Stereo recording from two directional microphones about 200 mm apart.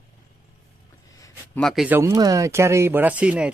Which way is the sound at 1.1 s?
15° left (ahead or behind).